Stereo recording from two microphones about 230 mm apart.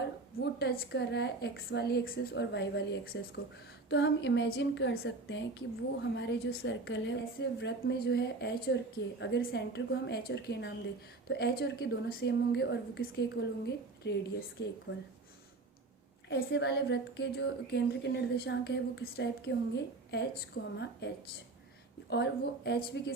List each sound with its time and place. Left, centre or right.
0.6 s a woman's voice: left
16.3 s a woman's voice: left
22.1 s a woman's voice: left